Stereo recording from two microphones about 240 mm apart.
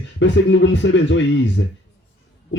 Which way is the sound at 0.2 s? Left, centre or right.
Left.